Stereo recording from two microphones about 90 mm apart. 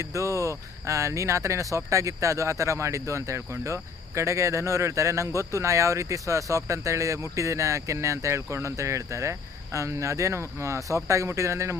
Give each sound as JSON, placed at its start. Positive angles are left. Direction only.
{"t": 0.0, "sound": "speech", "side_deg": -35}